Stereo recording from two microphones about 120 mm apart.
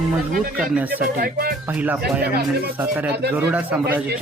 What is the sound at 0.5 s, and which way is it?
Speech, 10° right (ahead or behind).